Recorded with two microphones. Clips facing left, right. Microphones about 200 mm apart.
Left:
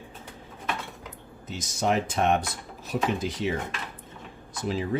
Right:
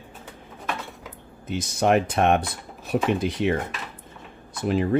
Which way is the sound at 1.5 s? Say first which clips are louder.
Right 6 dB; 60° right (ahead or behind).